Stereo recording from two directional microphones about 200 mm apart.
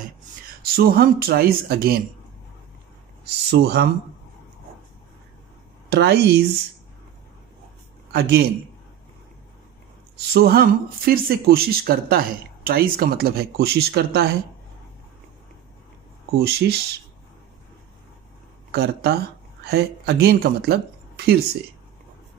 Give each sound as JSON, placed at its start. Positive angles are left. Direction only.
{"t": 0.7, "sound": "a woman's voice", "side_deg": -50}
{"t": 3.4, "sound": "a woman's voice", "side_deg": -55}
{"t": 5.9, "sound": "speech", "side_deg": -55}
{"t": 8.1, "sound": "a man's voice", "side_deg": -55}
{"t": 10.1, "sound": "a woman's voice", "side_deg": -50}
{"t": 16.3, "sound": "a woman's voice", "side_deg": -55}
{"t": 18.7, "sound": "a woman's voice", "side_deg": -55}